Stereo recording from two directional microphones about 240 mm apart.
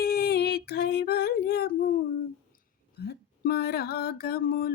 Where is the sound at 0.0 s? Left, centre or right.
Left.